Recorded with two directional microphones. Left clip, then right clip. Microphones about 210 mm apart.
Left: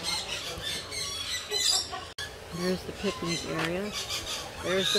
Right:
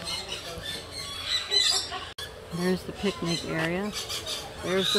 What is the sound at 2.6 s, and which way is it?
Speech, 50° right (ahead or behind).